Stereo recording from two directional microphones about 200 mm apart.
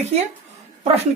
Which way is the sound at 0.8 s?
30° right (ahead or behind).